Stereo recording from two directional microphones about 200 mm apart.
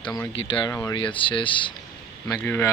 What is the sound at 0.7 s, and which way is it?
Speech, 15° left (ahead or behind).